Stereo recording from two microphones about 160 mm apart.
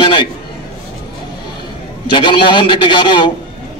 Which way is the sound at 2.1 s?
30° left (ahead or behind).